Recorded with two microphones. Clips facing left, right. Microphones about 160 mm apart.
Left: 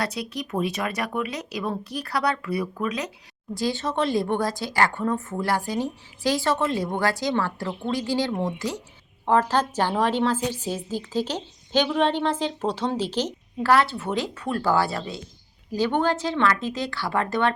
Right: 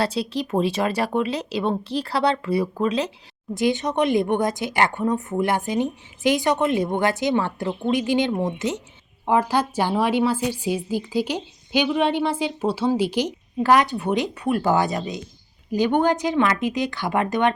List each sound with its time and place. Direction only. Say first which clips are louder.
0.0 s a woman's voice: right 5 dB; 30° right (ahead or behind)